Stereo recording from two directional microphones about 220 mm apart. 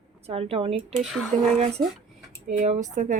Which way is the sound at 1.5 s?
30° right (ahead or behind).